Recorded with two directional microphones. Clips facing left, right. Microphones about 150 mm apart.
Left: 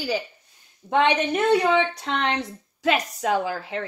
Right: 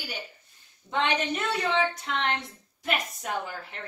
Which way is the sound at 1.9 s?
80° left.